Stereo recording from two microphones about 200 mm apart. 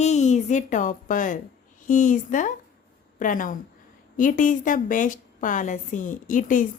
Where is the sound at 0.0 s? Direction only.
35° left (ahead or behind).